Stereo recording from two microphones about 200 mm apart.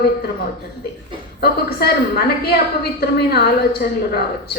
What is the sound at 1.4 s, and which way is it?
A woman's voice, 50° left (ahead or behind).